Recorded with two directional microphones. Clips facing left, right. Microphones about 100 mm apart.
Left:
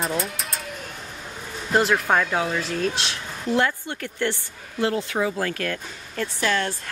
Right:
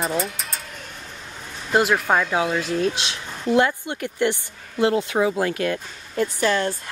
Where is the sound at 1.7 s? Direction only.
5° right (ahead or behind).